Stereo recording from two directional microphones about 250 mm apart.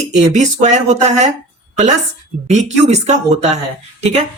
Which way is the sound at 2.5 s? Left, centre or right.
Right.